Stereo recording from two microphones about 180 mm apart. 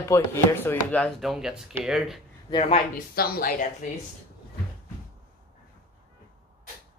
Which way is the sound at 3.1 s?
55° left (ahead or behind).